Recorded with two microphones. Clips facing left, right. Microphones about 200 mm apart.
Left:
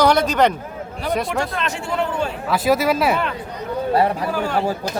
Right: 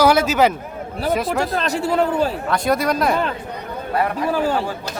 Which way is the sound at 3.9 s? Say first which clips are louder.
Left 2 dB; 30° left (ahead or behind).